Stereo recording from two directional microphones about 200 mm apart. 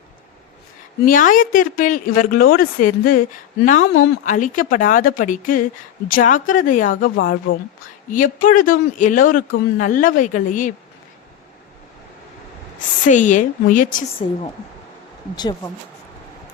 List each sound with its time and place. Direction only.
1.0 s speech: 40° left (ahead or behind)
13.1 s speech: 40° left (ahead or behind)
14.2 s speech: 30° left (ahead or behind)
15.4 s speech: 20° left (ahead or behind)